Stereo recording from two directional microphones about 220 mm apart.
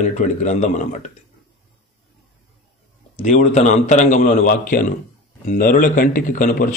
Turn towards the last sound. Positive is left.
turn(degrees=40)  # may be behind; listen again after turning